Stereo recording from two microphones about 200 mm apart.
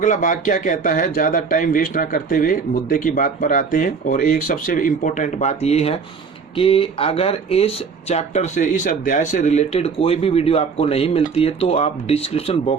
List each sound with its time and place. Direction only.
0.0 s speech: 40° left (ahead or behind)